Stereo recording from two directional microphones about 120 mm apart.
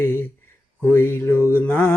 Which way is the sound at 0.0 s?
20° left (ahead or behind).